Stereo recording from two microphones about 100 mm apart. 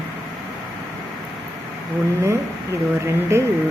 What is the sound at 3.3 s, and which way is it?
Speech, 25° right (ahead or behind).